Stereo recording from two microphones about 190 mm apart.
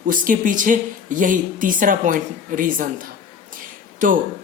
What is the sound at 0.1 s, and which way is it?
A man's voice, 45° right (ahead or behind).